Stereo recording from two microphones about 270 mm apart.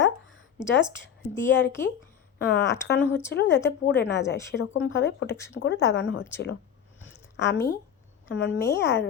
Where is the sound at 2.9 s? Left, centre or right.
Left.